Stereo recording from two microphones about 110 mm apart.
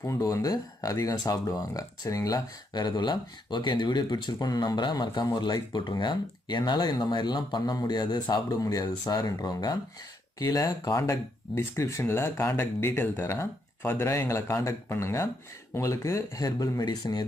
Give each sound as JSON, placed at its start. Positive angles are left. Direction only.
{"t": 0.0, "sound": "speech", "side_deg": 30}
{"t": 11.0, "sound": "speech", "side_deg": 25}